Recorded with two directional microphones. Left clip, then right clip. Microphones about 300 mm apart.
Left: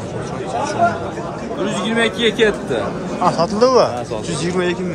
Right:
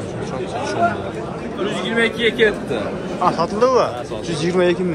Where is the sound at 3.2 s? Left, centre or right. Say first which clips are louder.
Left 2 dB; centre.